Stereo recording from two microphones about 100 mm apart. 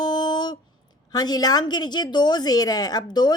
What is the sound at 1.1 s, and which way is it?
A woman's voice, 40° left (ahead or behind).